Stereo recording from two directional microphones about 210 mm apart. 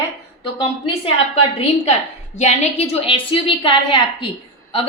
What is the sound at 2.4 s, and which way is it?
A woman's voice, 30° left (ahead or behind).